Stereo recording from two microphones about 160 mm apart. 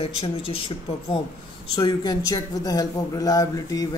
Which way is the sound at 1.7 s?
25° left (ahead or behind).